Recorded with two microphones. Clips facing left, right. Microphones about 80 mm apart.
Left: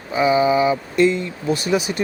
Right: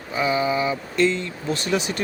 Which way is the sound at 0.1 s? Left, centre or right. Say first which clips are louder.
Left 6 dB; centre.